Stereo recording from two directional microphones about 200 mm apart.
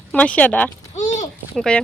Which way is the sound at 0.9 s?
35° left (ahead or behind).